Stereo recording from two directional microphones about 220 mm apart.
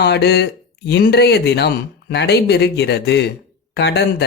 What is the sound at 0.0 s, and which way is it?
Speech, 50° left (ahead or behind).